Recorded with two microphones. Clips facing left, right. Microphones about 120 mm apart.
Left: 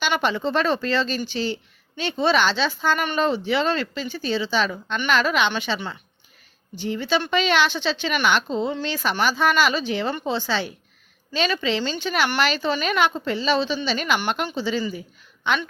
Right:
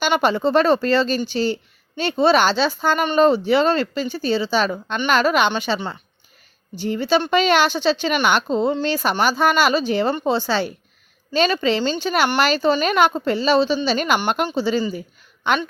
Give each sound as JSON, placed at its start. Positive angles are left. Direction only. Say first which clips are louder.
{"t": 0.0, "sound": "speech", "louder": "right 5 dB", "side_deg": -40}